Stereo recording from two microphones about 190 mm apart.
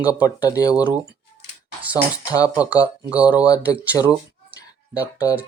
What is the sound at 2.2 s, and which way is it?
Speech, 20° left (ahead or behind).